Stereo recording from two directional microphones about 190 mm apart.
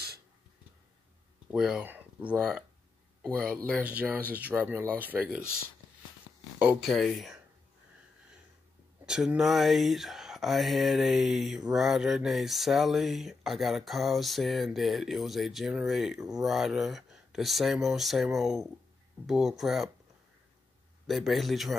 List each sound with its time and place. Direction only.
1.5 s speech: 5° right (ahead or behind)
6.6 s speech: 5° right (ahead or behind)
9.0 s speech: 5° right (ahead or behind)
21.1 s speech: centre (ahead or behind)